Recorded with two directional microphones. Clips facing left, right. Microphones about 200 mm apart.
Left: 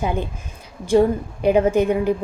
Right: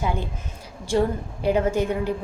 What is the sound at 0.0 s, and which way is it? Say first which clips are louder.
A woman's voice: left 3 dB; 15° left (ahead or behind).